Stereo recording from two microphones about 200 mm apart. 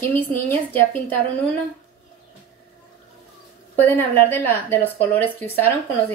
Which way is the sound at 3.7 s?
10° left (ahead or behind).